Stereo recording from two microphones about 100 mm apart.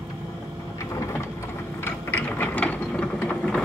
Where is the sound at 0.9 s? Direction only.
25° left (ahead or behind).